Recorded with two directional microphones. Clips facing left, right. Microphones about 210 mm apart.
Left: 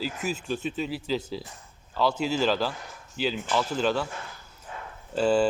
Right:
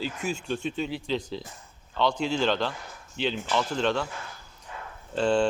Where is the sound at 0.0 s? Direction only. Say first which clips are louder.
Even; 5° left (ahead or behind).